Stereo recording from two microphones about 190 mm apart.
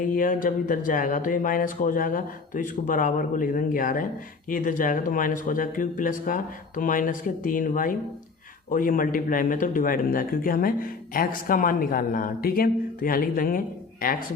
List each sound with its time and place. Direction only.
0.0 s speech: 45° left (ahead or behind)